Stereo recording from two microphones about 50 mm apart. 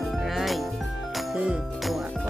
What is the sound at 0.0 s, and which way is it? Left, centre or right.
Music, centre.